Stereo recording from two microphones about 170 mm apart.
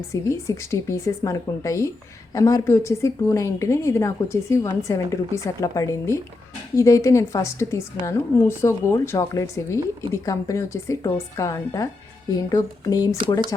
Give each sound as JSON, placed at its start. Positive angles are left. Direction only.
{"t": 0.1, "sound": "speech", "side_deg": 15}